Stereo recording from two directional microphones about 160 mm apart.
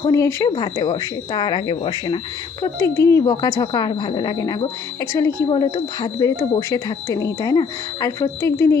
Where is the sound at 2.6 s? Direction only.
20° left (ahead or behind).